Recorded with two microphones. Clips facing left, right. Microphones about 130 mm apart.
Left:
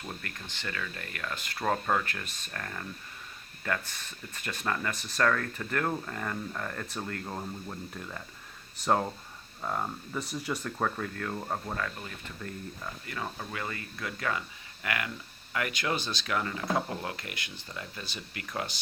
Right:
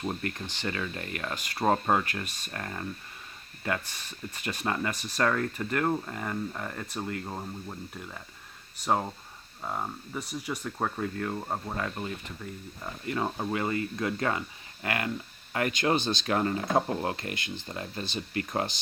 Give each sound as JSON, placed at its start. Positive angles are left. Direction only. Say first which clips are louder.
{"t": 0.0, "sound": "speech", "louder": "right 8 dB", "side_deg": -25}
{"t": 2.0, "sound": "speech", "louder": "right 3 dB", "side_deg": -10}
{"t": 11.8, "sound": "speech", "louder": "right 3 dB", "side_deg": -25}